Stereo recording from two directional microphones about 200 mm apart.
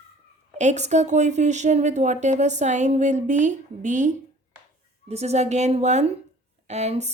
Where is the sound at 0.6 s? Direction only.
35° right (ahead or behind).